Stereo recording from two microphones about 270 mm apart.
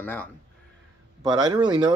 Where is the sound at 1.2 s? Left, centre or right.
Centre.